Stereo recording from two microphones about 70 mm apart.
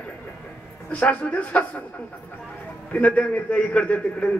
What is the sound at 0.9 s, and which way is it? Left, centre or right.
Speech, centre.